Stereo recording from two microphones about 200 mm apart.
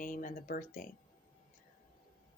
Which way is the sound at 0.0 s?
40° left (ahead or behind).